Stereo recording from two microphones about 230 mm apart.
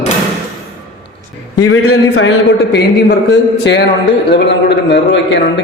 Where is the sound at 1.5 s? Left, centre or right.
Left.